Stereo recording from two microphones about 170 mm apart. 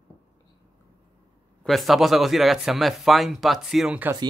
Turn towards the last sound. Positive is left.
turn(degrees=-5)  # may be behind; listen again after turning